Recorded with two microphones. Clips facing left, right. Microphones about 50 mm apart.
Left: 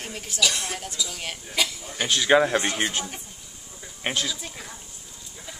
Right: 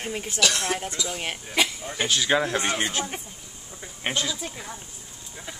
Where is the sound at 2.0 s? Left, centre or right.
Centre.